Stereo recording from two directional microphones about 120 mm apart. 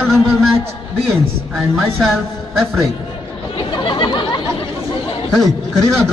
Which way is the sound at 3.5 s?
45° left (ahead or behind).